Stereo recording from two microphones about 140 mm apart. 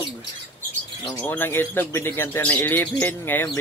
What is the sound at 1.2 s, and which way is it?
Speech, 15° left (ahead or behind).